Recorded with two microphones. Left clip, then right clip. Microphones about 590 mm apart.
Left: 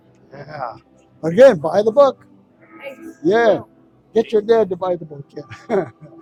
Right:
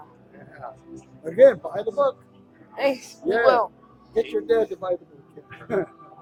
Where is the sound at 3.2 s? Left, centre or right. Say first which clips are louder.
Left 4 dB; left.